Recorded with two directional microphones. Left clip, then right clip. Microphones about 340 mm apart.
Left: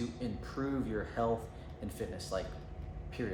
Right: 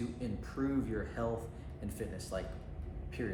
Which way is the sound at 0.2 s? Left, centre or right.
Centre.